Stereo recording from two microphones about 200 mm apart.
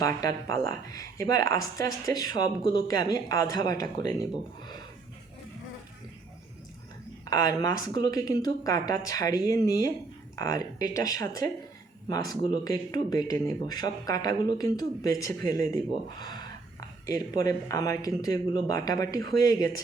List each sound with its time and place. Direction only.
0.0 s speech: 15° left (ahead or behind)
7.3 s speech: 20° left (ahead or behind)